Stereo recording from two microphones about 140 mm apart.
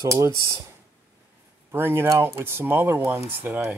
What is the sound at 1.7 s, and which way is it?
Speech, 15° right (ahead or behind).